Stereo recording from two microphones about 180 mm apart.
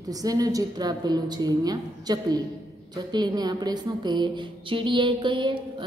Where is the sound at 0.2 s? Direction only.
20° right (ahead or behind).